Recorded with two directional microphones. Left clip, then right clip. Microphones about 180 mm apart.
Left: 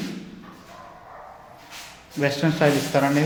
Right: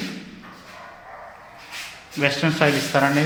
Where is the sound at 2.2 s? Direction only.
15° left (ahead or behind).